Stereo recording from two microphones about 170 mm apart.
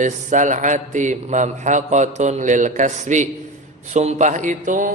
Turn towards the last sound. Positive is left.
turn(degrees=-50)  # may be behind; listen again after turning